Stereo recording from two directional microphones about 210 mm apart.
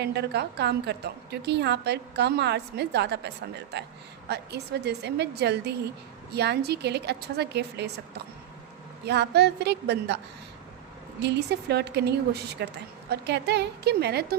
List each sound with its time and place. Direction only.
0.0 s a woman's voice: 50° right (ahead or behind)
9.0 s a woman's voice: 50° right (ahead or behind)
11.2 s a woman's voice: 55° right (ahead or behind)